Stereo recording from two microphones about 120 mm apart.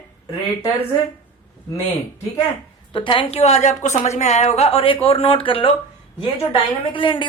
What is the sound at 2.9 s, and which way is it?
A woman's voice, 45° left (ahead or behind).